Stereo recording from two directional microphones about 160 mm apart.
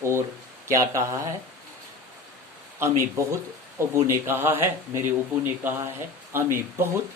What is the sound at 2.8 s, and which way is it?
Speech, 20° right (ahead or behind).